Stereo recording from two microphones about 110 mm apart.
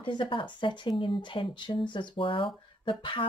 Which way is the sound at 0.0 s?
50° left (ahead or behind).